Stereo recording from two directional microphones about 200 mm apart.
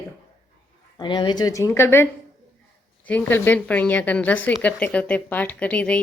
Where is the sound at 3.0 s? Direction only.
10° left (ahead or behind).